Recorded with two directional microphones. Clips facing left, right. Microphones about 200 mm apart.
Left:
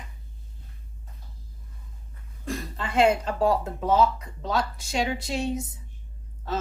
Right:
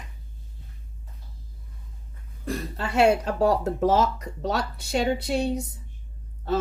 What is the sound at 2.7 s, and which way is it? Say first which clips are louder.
Speech: right 1 dB; 70° right (ahead or behind).